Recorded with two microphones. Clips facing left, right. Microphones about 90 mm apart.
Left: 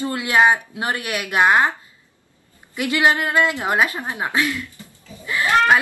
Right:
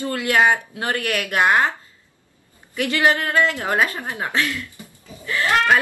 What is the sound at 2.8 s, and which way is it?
A woman's voice, 20° left (ahead or behind).